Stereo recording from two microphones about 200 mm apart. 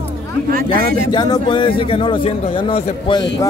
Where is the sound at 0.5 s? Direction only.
45° right (ahead or behind).